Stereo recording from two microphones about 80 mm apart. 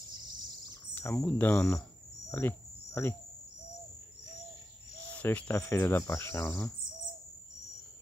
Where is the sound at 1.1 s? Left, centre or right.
Centre.